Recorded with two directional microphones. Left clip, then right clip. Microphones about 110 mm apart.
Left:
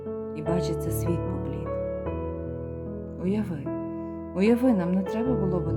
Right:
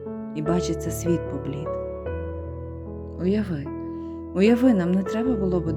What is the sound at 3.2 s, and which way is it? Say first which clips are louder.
Speech: right 4 dB; 30° right (ahead or behind).